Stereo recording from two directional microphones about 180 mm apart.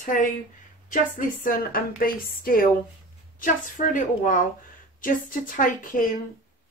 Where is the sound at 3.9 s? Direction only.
45° left (ahead or behind).